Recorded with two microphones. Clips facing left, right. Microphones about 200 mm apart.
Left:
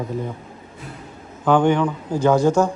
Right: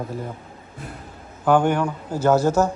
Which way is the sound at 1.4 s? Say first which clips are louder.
Left 2 dB; 10° right (ahead or behind).